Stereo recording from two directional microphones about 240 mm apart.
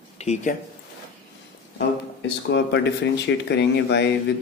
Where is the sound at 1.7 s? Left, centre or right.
Left.